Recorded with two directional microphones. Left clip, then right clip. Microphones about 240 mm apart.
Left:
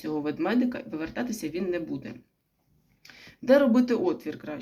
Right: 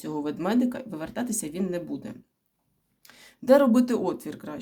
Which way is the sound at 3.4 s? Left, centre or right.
Right.